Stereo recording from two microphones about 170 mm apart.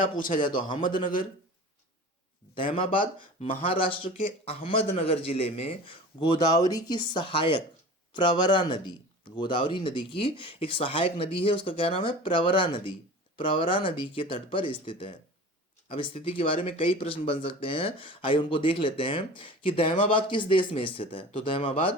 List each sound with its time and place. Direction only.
0.0 s a man's voice: 55° left (ahead or behind)
2.7 s speech: 30° left (ahead or behind)